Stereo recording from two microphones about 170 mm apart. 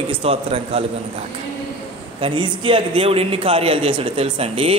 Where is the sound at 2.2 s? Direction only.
30° right (ahead or behind).